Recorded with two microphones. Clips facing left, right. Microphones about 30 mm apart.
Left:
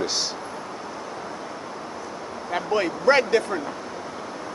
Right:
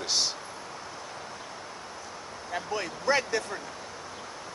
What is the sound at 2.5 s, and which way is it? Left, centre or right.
Vehicle, left.